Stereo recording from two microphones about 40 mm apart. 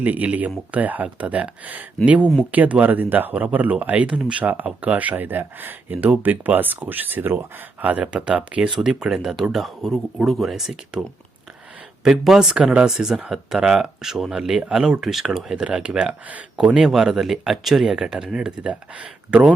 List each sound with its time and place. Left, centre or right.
0.0 s speech: right
2.0 s speech: right
7.9 s speech: right
8.8 s speech: centre
9.4 s speech: centre
12.0 s speech: centre
15.5 s speech: right
16.8 s speech: centre
17.9 s speech: centre